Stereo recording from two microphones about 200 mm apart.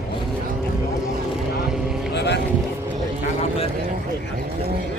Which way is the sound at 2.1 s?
55° left (ahead or behind).